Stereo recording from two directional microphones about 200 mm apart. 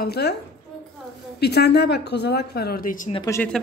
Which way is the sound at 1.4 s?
55° left (ahead or behind).